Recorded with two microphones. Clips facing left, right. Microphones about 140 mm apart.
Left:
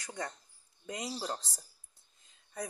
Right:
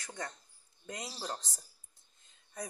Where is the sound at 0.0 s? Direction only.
15° left (ahead or behind).